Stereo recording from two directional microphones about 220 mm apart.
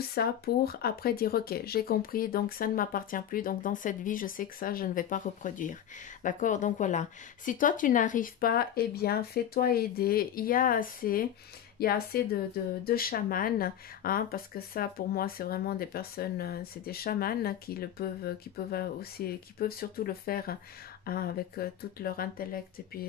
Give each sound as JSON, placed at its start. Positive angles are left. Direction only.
{"t": 0.0, "sound": "speech", "side_deg": 45}